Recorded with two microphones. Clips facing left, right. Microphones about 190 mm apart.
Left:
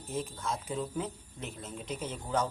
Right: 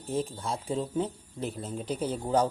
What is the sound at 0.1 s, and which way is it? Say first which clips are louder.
Speech: right 4 dB; 30° right (ahead or behind).